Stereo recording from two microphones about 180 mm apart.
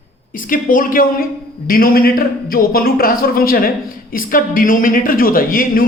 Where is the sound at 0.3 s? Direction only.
50° left (ahead or behind).